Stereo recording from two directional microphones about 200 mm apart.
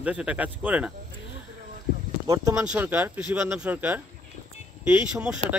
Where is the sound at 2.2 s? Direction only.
15° right (ahead or behind).